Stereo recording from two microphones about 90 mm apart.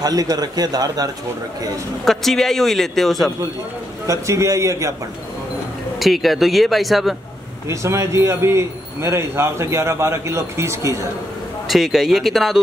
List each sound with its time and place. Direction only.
0.0 s a man's voice: 45° right (ahead or behind)
2.0 s a man's voice: 5° left (ahead or behind)
4.1 s a man's voice: 35° right (ahead or behind)
5.9 s a man's voice: centre (ahead or behind)
7.6 s a man's voice: 35° right (ahead or behind)
11.6 s a man's voice: centre (ahead or behind)